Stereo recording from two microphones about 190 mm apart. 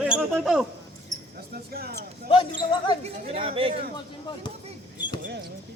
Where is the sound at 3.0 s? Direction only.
30° right (ahead or behind).